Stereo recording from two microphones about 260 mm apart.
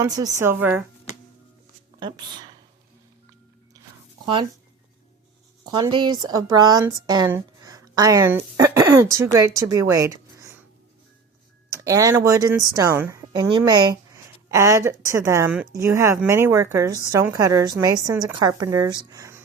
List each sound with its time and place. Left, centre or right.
0.0 s speech: centre
2.0 s speech: centre
5.6 s speech: centre
11.7 s speech: centre